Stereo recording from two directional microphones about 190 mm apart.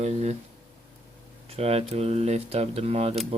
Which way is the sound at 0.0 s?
35° right (ahead or behind).